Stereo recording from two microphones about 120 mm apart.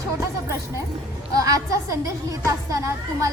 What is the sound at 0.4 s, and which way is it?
A woman's voice, 25° right (ahead or behind).